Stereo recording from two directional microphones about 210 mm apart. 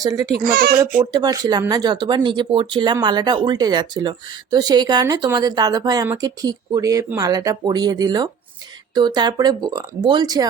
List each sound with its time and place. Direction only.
0.0 s a child's voice: 15° right (ahead or behind)
0.3 s a child's voice: 45° right (ahead or behind)
1.1 s a woman's voice: 20° right (ahead or behind)